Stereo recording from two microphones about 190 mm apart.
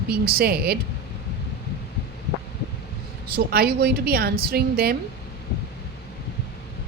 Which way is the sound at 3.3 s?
55° right (ahead or behind).